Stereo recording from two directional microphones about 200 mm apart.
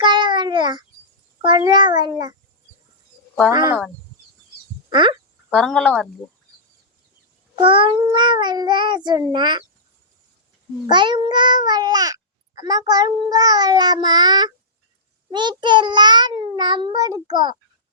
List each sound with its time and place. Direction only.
0.0 s a sound: 25° right (ahead or behind)
1.4 s speech: 20° right (ahead or behind)
3.5 s speech: 15° right (ahead or behind)
4.9 s speech: 25° right (ahead or behind)
5.5 s speech: centre (ahead or behind)
7.5 s speech: 25° right (ahead or behind)
10.8 s speech: 25° right (ahead or behind)